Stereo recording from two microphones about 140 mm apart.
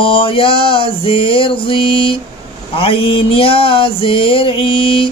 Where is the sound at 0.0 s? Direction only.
40° left (ahead or behind).